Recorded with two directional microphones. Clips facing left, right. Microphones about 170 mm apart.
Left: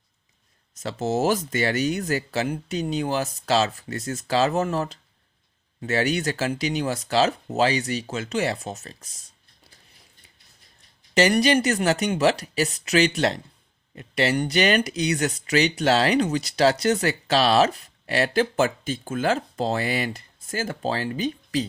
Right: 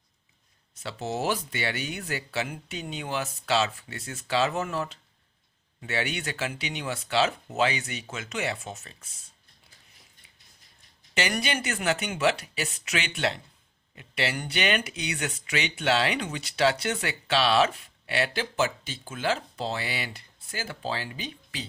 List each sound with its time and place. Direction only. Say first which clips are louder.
0.7 s speech: left 7 dB; 40° left (ahead or behind)
11.1 s speech: left 10 dB; 40° left (ahead or behind)